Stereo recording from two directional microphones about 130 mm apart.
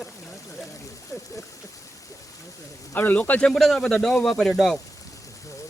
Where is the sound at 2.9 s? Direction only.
15° left (ahead or behind).